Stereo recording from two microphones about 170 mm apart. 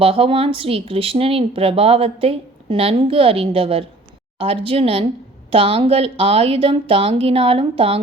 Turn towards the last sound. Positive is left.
turn(degrees=-35)  # may be behind; listen again after turning